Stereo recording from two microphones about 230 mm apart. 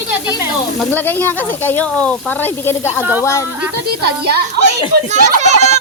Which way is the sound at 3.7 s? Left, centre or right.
Right.